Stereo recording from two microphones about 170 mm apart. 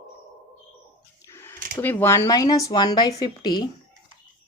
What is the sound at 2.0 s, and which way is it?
Speech, 15° left (ahead or behind).